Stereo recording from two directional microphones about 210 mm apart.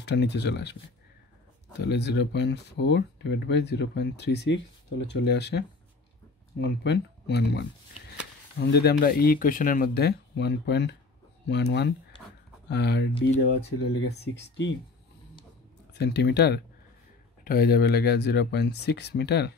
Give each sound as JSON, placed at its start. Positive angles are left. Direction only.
{"t": 0.0, "sound": "speech", "side_deg": 55}
{"t": 1.8, "sound": "speech", "side_deg": 55}
{"t": 15.9, "sound": "speech", "side_deg": 55}